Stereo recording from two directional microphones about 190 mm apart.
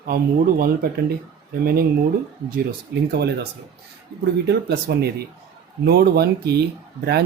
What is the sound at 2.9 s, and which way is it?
Speech, 60° right (ahead or behind).